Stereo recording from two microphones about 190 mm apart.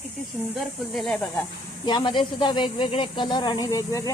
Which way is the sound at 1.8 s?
25° left (ahead or behind).